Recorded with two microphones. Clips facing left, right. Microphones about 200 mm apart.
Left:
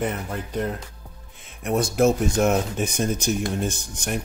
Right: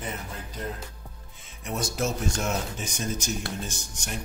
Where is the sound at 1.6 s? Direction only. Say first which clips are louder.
Left 10 dB; 55° left (ahead or behind).